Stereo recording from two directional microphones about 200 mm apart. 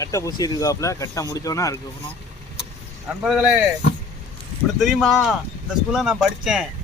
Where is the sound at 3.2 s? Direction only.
Centre (ahead or behind).